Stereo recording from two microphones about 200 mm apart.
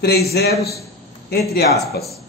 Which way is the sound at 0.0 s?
50° left (ahead or behind).